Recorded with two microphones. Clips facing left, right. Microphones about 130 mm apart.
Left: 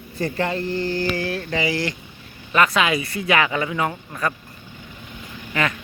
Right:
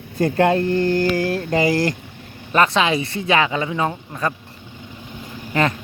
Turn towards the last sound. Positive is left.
turn(degrees=-30)  # may be behind; listen again after turning